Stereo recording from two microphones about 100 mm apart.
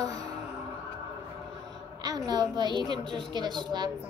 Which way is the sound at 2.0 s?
45° right (ahead or behind).